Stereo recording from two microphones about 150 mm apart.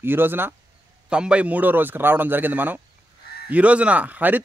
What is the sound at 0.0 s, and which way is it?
Speech, 15° right (ahead or behind).